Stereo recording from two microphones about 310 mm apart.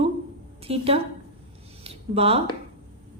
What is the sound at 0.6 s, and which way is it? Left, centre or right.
A woman's voice, centre.